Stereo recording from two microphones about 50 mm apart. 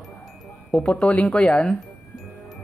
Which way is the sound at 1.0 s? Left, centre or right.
Left.